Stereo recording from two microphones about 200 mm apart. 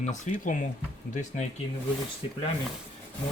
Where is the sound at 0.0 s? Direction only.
40° left (ahead or behind).